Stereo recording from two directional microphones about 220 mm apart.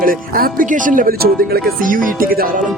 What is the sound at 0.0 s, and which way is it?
Speech, 40° right (ahead or behind).